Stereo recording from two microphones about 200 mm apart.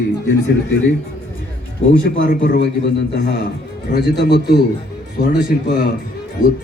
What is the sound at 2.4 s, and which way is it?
Speech, 60° left (ahead or behind).